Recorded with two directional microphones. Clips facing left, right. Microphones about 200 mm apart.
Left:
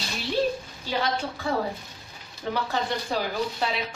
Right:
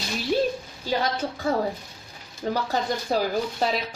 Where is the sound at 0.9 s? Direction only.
40° right (ahead or behind).